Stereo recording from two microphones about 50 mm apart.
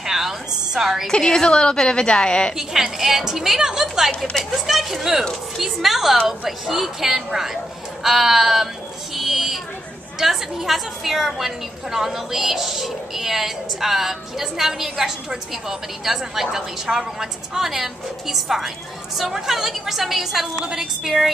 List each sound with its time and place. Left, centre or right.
0.0 s a sound: centre
1.1 s a woman's voice: centre
2.5 s a woman's voice: centre
4.2 s a woman's voice: centre
4.6 s a woman's voice: centre
9.1 s a sound: centre
10.1 s a woman's voice: centre